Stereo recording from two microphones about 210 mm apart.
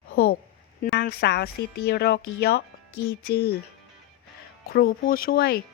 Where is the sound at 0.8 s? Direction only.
50° left (ahead or behind).